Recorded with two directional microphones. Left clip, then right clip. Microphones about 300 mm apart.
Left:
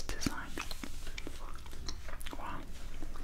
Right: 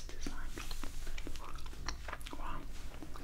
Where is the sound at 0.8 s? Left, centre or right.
Centre.